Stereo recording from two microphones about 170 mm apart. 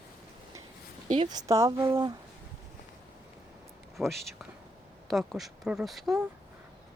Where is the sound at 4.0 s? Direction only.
Centre (ahead or behind).